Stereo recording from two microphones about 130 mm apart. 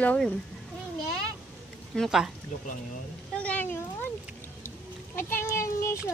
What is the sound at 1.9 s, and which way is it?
Speech, centre (ahead or behind).